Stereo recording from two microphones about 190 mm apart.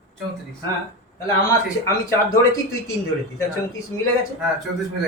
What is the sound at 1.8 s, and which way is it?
Speech, 15° left (ahead or behind).